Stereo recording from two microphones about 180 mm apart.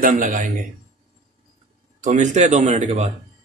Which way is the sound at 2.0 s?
45° right (ahead or behind).